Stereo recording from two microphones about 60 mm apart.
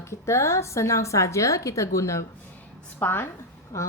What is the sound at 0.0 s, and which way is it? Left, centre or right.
A woman's voice, left.